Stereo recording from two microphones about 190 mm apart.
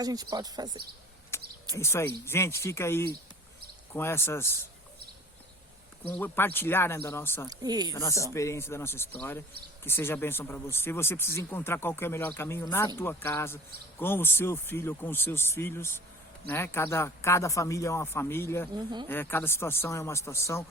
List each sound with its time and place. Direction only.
0.0 s speech: 20° right (ahead or behind)
1.3 s a sound: 15° left (ahead or behind)
1.7 s speech: 15° left (ahead or behind)
6.1 s speech: 10° left (ahead or behind)
7.6 s speech: 20° right (ahead or behind)
8.3 s speech: 15° left (ahead or behind)